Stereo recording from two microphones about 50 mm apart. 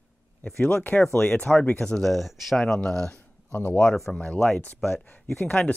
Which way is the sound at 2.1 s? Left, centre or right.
Centre.